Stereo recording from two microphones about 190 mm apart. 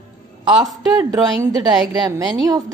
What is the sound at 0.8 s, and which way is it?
A woman's voice, 20° right (ahead or behind).